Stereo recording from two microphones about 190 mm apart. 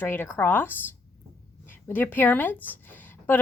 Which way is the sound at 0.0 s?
10° left (ahead or behind).